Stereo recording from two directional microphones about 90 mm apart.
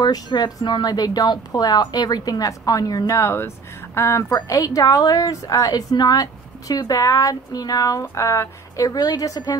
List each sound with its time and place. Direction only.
0.0 s speech: 50° left (ahead or behind); by 4.2 s 30° left (ahead or behind)
4.3 s a woman's voice: 45° left (ahead or behind)